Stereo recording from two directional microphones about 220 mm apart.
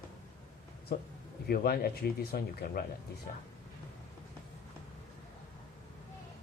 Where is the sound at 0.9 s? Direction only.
45° left (ahead or behind).